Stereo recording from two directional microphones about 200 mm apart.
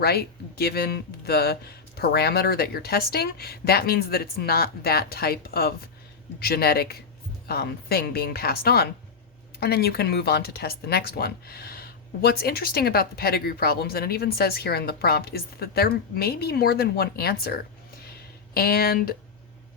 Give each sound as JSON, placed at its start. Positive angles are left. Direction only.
{"t": 0.0, "sound": "speech", "side_deg": 50}